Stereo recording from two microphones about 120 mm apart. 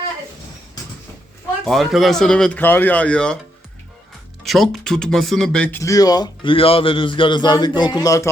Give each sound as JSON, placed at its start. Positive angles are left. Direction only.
{"t": 1.6, "sound": "speech", "side_deg": 0}
{"t": 4.4, "sound": "speech", "side_deg": 0}
{"t": 5.8, "sound": "a man's voice", "side_deg": 30}